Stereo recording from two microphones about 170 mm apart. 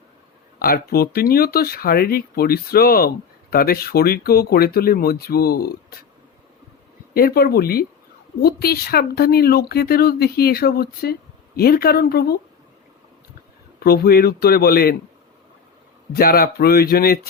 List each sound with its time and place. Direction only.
0.6 s speech: 60° left (ahead or behind)
7.1 s speech: 65° left (ahead or behind)
13.7 s speech: 65° left (ahead or behind)
16.1 s speech: 65° left (ahead or behind)